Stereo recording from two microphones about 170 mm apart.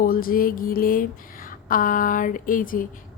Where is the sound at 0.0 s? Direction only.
55° left (ahead or behind).